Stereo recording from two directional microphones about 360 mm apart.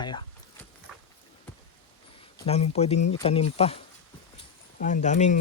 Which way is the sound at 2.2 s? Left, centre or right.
Centre.